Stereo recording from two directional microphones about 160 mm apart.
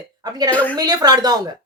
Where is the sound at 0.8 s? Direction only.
25° right (ahead or behind).